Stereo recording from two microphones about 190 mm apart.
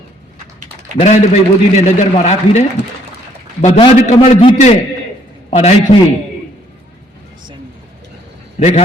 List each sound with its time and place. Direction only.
0.9 s a man's voice: 35° left (ahead or behind)
3.6 s a man's voice: 35° left (ahead or behind)
8.5 s a man's voice: 35° left (ahead or behind)